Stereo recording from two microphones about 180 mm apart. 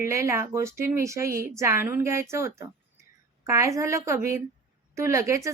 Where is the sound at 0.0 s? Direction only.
15° right (ahead or behind).